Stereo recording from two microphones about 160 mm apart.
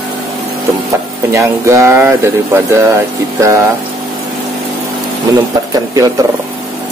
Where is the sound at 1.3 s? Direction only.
15° right (ahead or behind).